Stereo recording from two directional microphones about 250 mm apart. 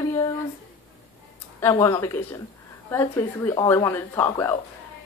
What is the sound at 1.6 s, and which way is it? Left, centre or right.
Speech, centre.